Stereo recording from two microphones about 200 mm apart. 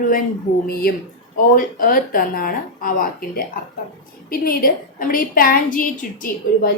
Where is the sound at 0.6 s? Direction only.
50° left (ahead or behind).